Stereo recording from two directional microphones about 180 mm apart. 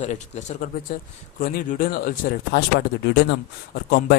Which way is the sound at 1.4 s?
55° left (ahead or behind).